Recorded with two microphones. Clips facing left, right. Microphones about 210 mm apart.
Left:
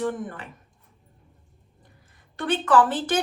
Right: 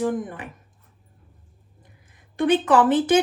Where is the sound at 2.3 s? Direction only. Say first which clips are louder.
Right 3 dB; 15° right (ahead or behind).